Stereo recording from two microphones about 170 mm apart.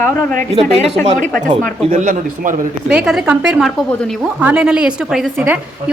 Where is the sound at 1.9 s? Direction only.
50° right (ahead or behind).